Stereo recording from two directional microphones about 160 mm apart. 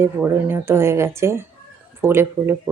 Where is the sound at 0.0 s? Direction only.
10° right (ahead or behind).